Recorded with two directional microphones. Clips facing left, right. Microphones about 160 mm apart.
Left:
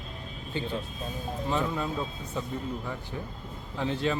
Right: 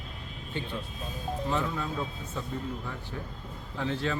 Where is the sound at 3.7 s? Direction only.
20° left (ahead or behind).